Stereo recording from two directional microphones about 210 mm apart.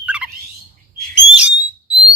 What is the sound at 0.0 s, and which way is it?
Bird, 5° right (ahead or behind).